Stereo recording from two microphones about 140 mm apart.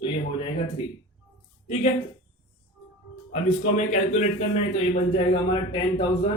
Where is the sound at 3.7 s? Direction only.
60° left (ahead or behind).